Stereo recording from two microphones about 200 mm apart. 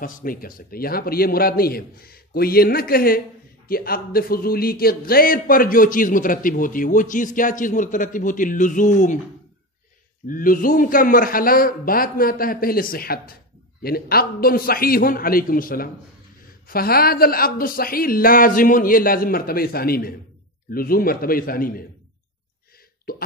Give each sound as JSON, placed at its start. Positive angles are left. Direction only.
{"t": 0.0, "sound": "a man's voice", "side_deg": 45}
{"t": 10.2, "sound": "a man's voice", "side_deg": 45}